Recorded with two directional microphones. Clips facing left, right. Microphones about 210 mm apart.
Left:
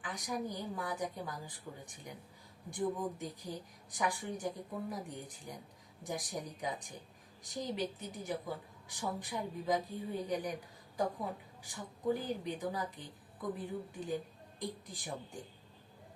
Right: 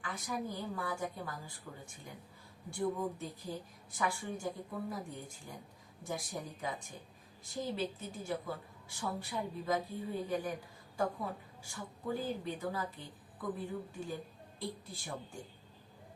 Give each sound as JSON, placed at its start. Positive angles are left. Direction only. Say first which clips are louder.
{"t": 0.0, "sound": "a woman's voice", "louder": "left 1 dB", "side_deg": 15}
{"t": 11.6, "sound": "a woman's voice", "louder": "left 6 dB", "side_deg": 15}